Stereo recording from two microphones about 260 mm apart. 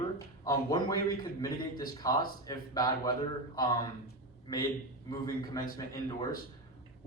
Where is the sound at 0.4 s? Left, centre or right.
Centre.